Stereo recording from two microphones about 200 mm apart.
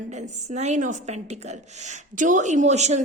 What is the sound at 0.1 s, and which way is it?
A woman's voice, 35° right (ahead or behind).